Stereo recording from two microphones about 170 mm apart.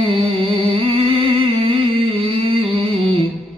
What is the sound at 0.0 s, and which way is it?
Humming, 35° right (ahead or behind).